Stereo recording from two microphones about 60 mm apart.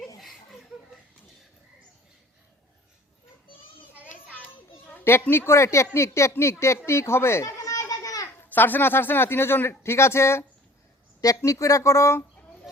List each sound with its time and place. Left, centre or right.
5.0 s speech: left
7.6 s children playing: left
8.4 s speech: left
11.2 s speech: left